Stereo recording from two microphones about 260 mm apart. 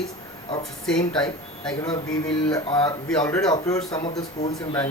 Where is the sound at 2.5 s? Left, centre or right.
Centre.